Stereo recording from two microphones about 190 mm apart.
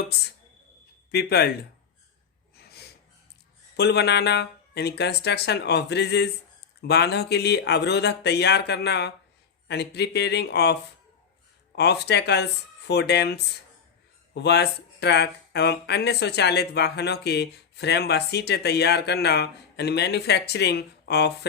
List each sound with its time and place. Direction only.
1.1 s speech: 55° left (ahead or behind)
3.8 s speech: 60° left (ahead or behind)